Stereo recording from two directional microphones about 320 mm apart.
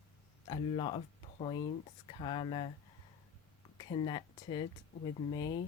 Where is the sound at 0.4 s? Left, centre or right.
Centre.